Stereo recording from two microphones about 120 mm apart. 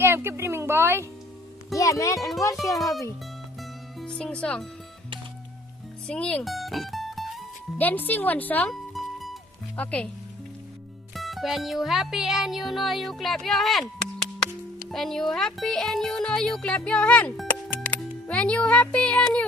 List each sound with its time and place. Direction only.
0.0 s a woman's voice: 20° right (ahead or behind)
1.7 s a child's voice: 25° left (ahead or behind)
4.0 s speech: 10° left (ahead or behind)
6.1 s music: 10° left (ahead or behind)
7.8 s speech: 15° left (ahead or behind)
8.7 s music: centre (ahead or behind)
9.7 s speech: 10° left (ahead or behind)
11.1 s music: centre (ahead or behind)
14.8 s speech: centre (ahead or behind)